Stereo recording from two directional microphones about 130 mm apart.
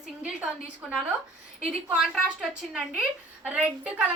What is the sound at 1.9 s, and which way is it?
A woman's voice, 5° right (ahead or behind).